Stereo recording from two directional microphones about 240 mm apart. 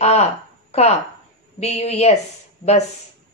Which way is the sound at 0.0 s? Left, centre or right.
Left.